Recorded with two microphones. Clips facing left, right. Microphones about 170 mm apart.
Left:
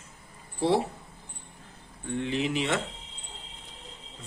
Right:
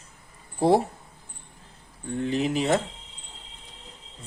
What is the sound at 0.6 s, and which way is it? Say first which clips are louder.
Speech: right 5 dB; 45° right (ahead or behind).